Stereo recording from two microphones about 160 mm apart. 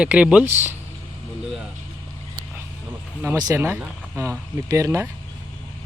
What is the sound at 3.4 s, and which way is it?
Speech, 20° right (ahead or behind).